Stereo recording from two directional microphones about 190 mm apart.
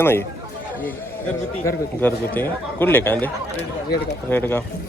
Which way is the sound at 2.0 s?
10° left (ahead or behind).